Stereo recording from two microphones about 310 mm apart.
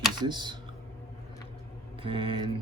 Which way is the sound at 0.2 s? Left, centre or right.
Centre.